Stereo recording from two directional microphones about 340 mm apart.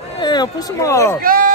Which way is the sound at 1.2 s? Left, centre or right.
Right.